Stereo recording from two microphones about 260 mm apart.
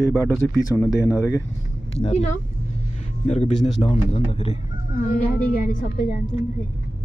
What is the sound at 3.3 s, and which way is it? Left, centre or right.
A man's voice, left.